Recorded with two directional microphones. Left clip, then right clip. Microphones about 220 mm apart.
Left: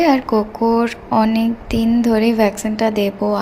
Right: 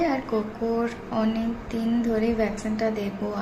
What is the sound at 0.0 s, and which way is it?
Speech, 40° left (ahead or behind).